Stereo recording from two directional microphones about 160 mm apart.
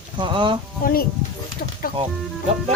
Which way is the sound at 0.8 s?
65° left (ahead or behind).